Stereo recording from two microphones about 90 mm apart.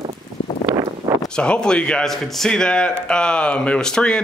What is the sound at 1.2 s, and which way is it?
Speech, 10° left (ahead or behind).